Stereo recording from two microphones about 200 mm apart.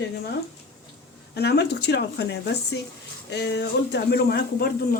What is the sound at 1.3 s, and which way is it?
Speech, 55° left (ahead or behind).